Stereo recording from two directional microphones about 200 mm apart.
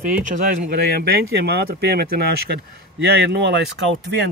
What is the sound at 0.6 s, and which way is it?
Speech, 50° right (ahead or behind).